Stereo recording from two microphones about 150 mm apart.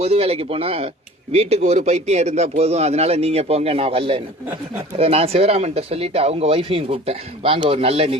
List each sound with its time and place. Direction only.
0.0 s speech: 40° right (ahead or behind)